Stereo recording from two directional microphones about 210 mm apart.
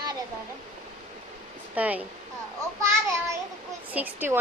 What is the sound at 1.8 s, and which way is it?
Speech, 5° right (ahead or behind).